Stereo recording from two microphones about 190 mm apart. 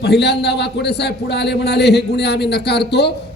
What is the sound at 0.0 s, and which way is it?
A man's voice, 60° left (ahead or behind).